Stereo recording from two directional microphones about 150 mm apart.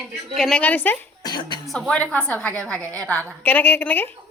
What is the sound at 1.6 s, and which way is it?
A woman's voice, centre (ahead or behind).